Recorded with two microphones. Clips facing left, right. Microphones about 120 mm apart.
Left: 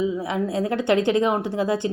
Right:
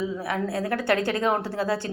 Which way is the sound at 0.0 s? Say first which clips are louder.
Left 4 dB; 20° left (ahead or behind).